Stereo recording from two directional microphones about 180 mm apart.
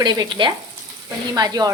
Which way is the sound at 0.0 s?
25° right (ahead or behind).